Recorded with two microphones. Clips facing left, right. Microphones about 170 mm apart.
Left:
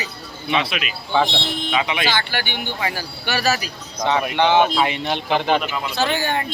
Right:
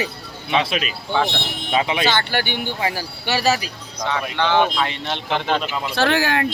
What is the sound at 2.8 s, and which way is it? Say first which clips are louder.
Speech: right 2 dB; 30° right (ahead or behind).